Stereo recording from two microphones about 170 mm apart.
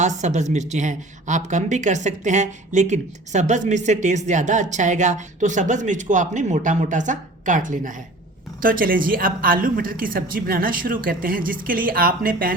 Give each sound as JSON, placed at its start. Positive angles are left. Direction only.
{"t": 0.0, "sound": "a woman's voice", "side_deg": -45}